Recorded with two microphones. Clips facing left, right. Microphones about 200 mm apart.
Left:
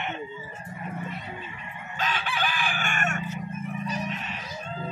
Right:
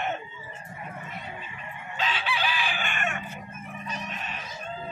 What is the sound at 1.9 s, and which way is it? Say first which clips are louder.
Chicken: even; 50° left (ahead or behind).